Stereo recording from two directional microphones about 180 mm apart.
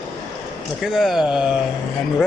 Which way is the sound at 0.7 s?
Centre (ahead or behind).